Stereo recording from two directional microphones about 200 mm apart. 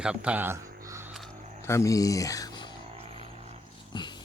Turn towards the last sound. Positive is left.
turn(degrees=20)  # may be behind; listen again after turning